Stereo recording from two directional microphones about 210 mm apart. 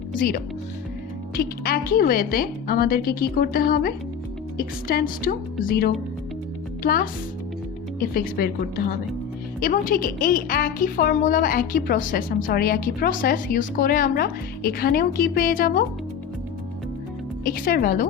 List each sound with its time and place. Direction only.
0.1 s a woman's voice: 40° left (ahead or behind)
17.4 s a woman's voice: 45° left (ahead or behind)